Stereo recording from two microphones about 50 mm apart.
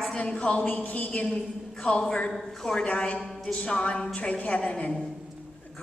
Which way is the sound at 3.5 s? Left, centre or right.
Centre.